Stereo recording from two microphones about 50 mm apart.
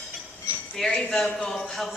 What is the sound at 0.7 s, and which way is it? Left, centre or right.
Speech, centre.